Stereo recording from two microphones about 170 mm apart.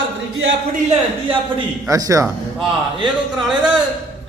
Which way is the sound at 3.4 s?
5° right (ahead or behind).